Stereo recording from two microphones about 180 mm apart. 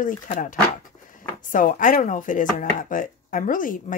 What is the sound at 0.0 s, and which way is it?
Speech, 45° left (ahead or behind).